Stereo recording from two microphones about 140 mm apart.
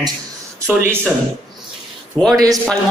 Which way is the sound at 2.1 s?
5° left (ahead or behind).